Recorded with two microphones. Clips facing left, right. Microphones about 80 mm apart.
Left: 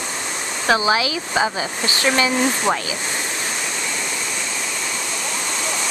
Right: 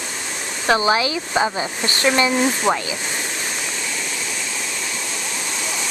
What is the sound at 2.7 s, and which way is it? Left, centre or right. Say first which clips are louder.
Speech: right 2 dB; centre.